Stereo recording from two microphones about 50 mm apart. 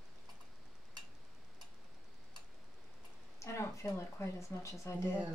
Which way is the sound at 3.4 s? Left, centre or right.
Left.